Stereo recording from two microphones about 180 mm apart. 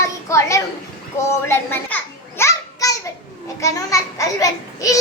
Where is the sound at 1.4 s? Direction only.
15° left (ahead or behind).